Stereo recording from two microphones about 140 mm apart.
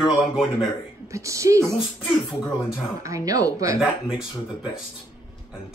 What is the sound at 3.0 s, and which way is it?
Speech, 20° right (ahead or behind).